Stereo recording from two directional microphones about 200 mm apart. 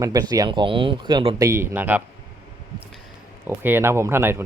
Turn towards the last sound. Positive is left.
turn(degrees=-10)  # may be behind; listen again after turning